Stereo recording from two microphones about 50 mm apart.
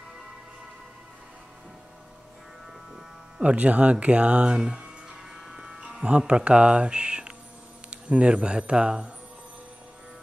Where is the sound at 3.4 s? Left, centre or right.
Right.